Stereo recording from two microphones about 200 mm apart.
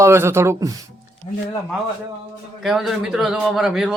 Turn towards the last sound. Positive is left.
turn(degrees=0)  # may be behind; listen again after turning